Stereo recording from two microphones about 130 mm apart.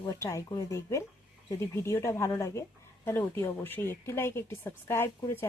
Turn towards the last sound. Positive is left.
turn(degrees=20)  # may be behind; listen again after turning